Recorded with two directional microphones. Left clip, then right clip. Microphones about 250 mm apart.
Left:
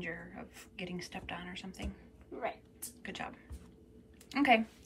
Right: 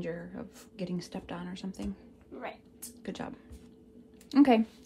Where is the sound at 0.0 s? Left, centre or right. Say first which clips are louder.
Right 4 dB; centre.